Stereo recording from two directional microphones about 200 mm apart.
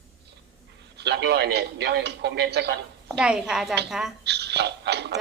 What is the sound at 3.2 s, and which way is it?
Speech, 5° right (ahead or behind).